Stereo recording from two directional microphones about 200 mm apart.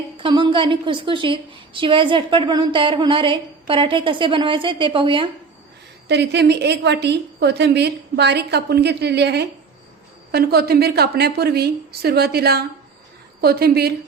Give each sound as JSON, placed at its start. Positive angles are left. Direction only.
{"t": 0.2, "sound": "a woman's voice", "side_deg": -25}
{"t": 6.1, "sound": "a woman's voice", "side_deg": -60}